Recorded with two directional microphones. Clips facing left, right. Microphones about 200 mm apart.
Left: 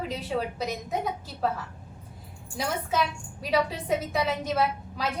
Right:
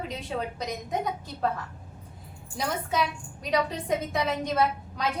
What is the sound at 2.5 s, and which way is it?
A woman's voice, 5° left (ahead or behind).